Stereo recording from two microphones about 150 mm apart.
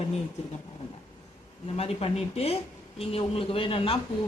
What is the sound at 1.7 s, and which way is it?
Speech, 40° left (ahead or behind).